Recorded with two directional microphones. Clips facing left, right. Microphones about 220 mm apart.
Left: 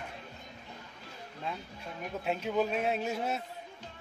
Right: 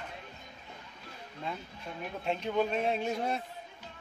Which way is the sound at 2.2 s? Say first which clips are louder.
Even; 5° left (ahead or behind).